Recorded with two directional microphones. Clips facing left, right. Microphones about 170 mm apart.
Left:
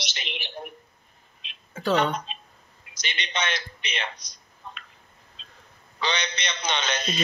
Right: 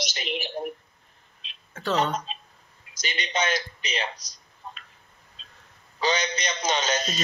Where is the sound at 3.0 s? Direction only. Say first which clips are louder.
Right 3 dB; 40° right (ahead or behind).